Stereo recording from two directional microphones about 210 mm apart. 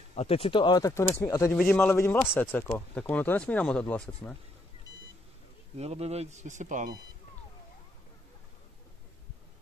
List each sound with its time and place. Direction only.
0.1 s speech: 30° left (ahead or behind); by 4.4 s 5° left (ahead or behind)
5.8 s speech: 30° right (ahead or behind)